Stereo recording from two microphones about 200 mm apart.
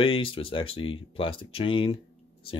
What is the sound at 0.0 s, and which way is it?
Speech, 25° left (ahead or behind).